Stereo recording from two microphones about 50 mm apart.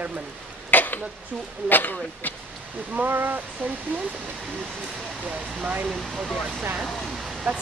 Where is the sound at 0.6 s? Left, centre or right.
Left.